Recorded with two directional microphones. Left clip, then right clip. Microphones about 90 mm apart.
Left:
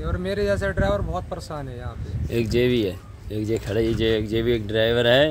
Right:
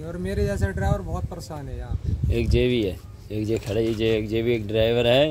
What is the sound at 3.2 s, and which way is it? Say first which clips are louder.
Speech: left 1 dB; 20° right (ahead or behind).